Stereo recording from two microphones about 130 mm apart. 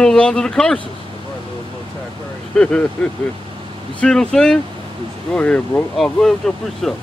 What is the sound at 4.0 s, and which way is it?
Speech, 5° left (ahead or behind).